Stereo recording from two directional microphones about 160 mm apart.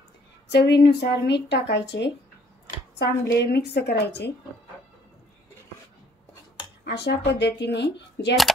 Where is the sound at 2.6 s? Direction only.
80° left.